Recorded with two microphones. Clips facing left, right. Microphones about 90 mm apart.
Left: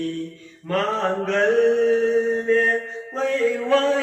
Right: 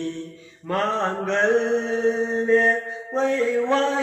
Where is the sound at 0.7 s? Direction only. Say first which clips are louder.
Left 1 dB; 20° right (ahead or behind).